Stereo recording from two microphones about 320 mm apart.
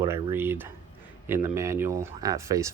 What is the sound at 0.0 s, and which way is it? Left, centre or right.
Speech, centre.